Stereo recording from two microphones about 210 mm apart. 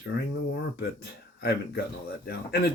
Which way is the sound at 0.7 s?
50° left (ahead or behind).